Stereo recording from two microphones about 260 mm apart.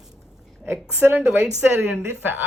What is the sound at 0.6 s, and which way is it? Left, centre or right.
Speech, centre.